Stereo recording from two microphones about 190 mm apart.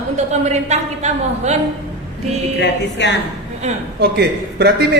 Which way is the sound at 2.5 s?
65° left (ahead or behind).